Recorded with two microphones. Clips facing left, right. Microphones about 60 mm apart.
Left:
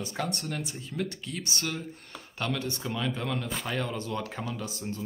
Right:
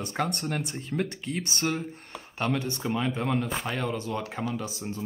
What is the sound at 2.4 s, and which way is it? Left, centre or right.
Speech, right.